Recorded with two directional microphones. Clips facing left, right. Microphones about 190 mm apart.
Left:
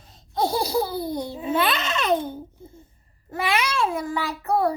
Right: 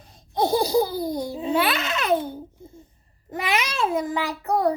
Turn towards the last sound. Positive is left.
turn(degrees=-15)  # may be behind; listen again after turning